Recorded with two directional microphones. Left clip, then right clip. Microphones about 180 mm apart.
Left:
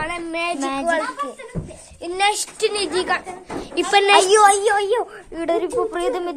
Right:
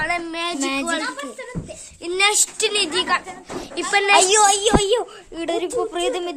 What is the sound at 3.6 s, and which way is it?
Speech, 10° right (ahead or behind).